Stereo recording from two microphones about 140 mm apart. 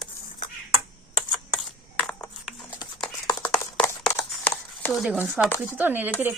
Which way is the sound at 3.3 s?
25° left (ahead or behind).